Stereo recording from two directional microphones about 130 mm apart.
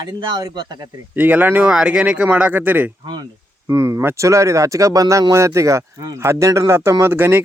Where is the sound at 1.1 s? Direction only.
15° right (ahead or behind).